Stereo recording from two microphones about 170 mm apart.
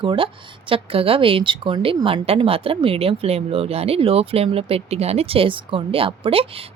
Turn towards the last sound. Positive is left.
turn(degrees=-35)  # may be behind; listen again after turning